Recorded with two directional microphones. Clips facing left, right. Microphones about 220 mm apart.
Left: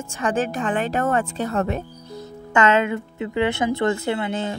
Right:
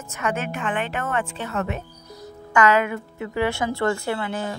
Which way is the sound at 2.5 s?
25° left (ahead or behind).